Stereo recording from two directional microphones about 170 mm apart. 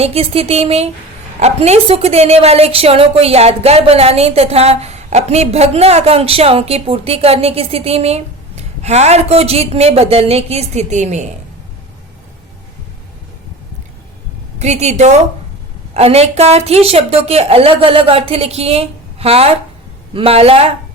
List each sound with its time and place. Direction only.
0.0 s a woman's voice: 35° right (ahead or behind)
14.6 s a woman's voice: 40° right (ahead or behind)